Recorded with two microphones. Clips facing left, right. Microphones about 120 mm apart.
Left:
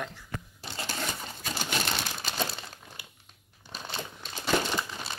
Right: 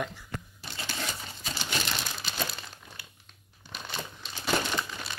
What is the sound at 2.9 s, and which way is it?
Crumpling, 15° left (ahead or behind).